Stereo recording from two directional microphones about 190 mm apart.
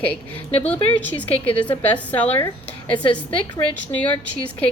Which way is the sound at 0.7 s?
10° left (ahead or behind).